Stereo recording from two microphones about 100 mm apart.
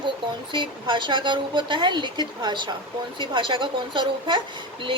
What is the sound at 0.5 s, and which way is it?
A woman's voice, 55° right (ahead or behind).